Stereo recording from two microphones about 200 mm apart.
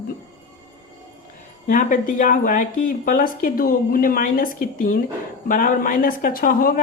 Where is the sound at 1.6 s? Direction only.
40° left (ahead or behind).